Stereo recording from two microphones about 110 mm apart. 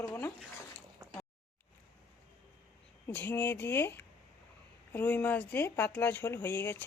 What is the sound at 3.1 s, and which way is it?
Speech, 15° left (ahead or behind).